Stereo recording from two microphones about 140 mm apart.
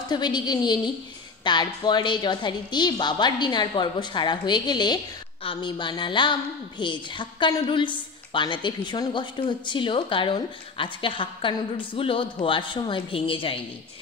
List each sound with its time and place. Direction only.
0.1 s a woman's voice: 30° left (ahead or behind)